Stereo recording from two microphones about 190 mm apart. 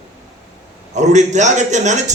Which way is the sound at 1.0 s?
40° right (ahead or behind).